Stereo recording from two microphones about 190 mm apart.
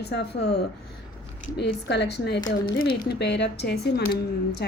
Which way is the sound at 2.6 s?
55° left (ahead or behind).